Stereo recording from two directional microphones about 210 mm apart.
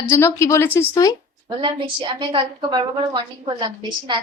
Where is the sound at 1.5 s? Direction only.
20° right (ahead or behind).